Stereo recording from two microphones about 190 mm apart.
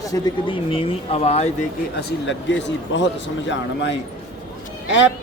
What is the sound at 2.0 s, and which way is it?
Speech, 65° left (ahead or behind).